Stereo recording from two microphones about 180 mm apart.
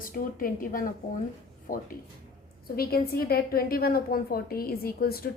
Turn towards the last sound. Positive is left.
turn(degrees=55)  # may be behind; listen again after turning